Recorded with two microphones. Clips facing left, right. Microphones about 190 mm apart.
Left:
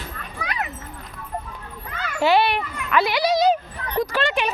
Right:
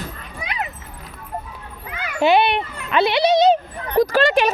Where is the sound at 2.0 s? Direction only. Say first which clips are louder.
Right 2 dB; 20° right (ahead or behind).